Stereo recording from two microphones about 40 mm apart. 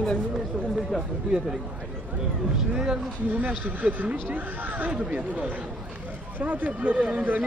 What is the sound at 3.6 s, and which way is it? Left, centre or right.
Speech, right.